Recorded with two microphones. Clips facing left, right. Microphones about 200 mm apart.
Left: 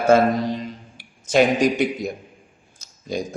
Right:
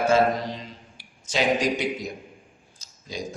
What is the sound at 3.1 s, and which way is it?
Speech, 55° left (ahead or behind).